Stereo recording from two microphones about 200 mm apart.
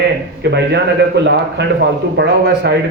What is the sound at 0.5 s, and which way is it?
A man's voice, 60° right (ahead or behind).